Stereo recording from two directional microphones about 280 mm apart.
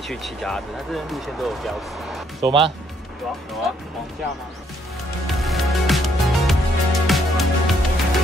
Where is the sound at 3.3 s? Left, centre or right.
Centre.